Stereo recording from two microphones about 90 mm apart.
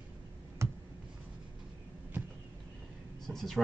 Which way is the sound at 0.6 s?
30° right (ahead or behind).